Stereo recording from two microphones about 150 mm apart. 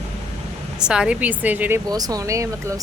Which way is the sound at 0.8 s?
5° right (ahead or behind).